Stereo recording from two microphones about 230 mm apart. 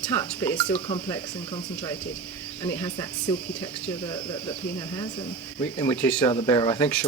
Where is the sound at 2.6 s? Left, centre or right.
Centre.